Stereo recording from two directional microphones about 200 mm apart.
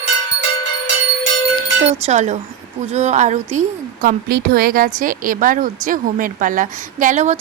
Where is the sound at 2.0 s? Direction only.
35° right (ahead or behind).